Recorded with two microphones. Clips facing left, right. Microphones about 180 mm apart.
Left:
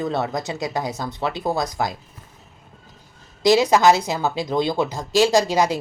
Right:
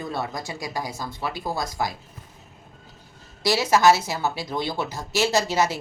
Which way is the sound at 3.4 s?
20° left (ahead or behind).